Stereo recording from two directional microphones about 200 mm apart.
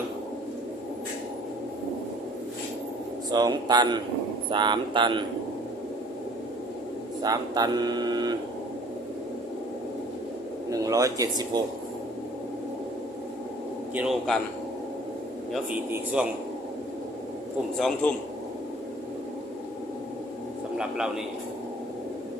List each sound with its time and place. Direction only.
3.2 s speech: 20° right (ahead or behind)
7.2 s speech: 20° right (ahead or behind)
10.7 s speech: 15° right (ahead or behind)
13.9 s a man's voice: 5° right (ahead or behind)
15.5 s speech: 5° right (ahead or behind)
17.7 s a man's voice: centre (ahead or behind)